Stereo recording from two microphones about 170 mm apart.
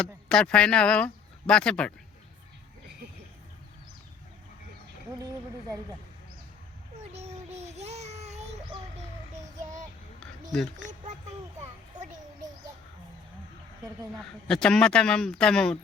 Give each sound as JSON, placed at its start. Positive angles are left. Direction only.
{"t": 0.0, "sound": "speech", "side_deg": 5}
{"t": 7.1, "sound": "babbling", "side_deg": -40}
{"t": 10.8, "sound": "a sound", "side_deg": -45}
{"t": 14.4, "sound": "speech", "side_deg": 5}